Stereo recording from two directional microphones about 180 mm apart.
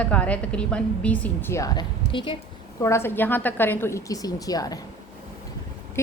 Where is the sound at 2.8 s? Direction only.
15° left (ahead or behind).